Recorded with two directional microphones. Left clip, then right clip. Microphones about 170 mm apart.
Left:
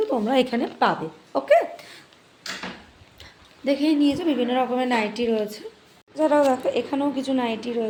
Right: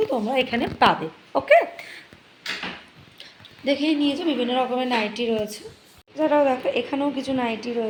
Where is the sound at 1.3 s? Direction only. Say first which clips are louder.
Right 2 dB; 10° left (ahead or behind).